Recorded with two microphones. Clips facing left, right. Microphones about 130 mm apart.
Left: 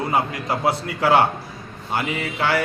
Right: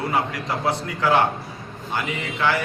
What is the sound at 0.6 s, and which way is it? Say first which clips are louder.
Speech: left 2 dB; 25° left (ahead or behind).